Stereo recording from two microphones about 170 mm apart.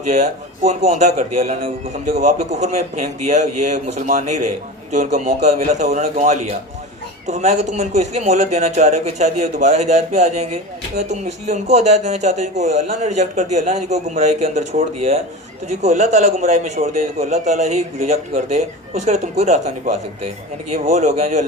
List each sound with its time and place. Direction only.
0.7 s speech: 40° right (ahead or behind)